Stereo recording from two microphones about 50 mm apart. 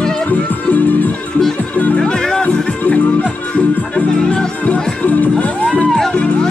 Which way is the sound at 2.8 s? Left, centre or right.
Left.